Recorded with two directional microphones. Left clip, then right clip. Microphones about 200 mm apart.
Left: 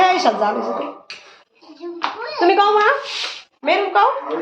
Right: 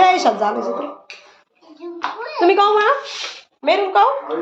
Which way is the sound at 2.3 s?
5° right (ahead or behind).